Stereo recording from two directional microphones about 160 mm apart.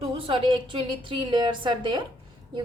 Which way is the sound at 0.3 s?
30° right (ahead or behind).